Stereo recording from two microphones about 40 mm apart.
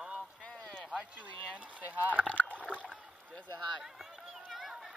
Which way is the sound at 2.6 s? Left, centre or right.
Left.